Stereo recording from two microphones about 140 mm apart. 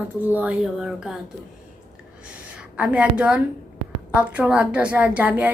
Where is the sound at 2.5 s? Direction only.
10° right (ahead or behind).